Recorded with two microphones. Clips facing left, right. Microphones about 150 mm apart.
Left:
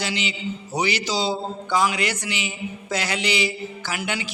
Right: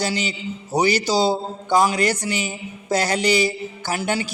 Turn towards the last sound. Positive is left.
turn(degrees=-40)  # may be behind; listen again after turning